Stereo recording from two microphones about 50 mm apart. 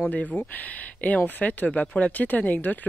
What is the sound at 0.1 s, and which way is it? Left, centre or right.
Speech, left.